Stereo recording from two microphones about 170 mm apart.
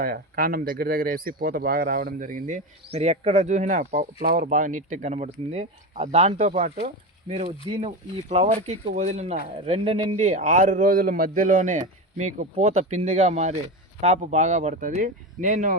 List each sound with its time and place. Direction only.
0.0 s speech: 60° right (ahead or behind)
2.9 s speech: 40° right (ahead or behind)
7.7 s speech: 35° right (ahead or behind)
10.2 s speech: 45° right (ahead or behind)